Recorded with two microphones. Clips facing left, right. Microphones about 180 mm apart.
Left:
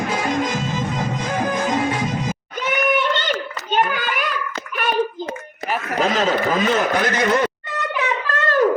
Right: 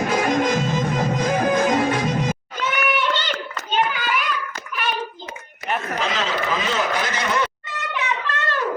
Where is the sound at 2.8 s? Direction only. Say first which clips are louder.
Left 4 dB; 45° left (ahead or behind).